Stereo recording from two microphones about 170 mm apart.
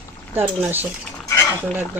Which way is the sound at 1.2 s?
15° left (ahead or behind).